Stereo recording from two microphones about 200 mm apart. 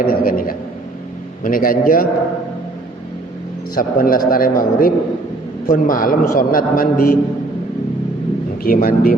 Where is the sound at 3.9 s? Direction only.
45° left (ahead or behind).